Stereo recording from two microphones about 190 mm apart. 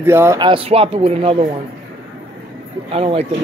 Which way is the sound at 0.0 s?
15° right (ahead or behind).